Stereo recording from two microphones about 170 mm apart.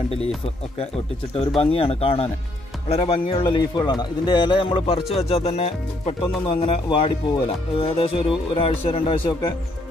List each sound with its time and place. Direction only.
1.6 s a man's voice: 35° left (ahead or behind)